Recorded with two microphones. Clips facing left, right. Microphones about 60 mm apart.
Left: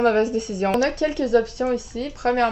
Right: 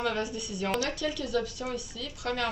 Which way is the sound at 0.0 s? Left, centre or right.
Left.